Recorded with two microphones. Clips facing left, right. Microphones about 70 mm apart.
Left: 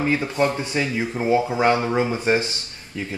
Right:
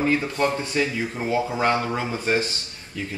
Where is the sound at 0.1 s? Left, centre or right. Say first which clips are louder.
Left 1 dB; centre.